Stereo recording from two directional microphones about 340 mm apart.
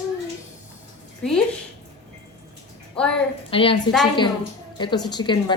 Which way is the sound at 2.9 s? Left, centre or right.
Centre.